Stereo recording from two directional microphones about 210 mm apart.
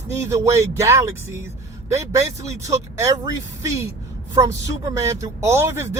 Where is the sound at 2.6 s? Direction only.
15° right (ahead or behind).